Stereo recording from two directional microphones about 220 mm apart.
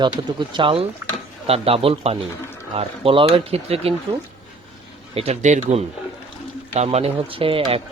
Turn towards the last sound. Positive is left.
turn(degrees=-25)  # may be behind; listen again after turning